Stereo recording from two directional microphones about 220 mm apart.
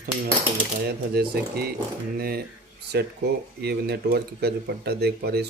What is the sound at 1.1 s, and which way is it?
Speech, 45° right (ahead or behind).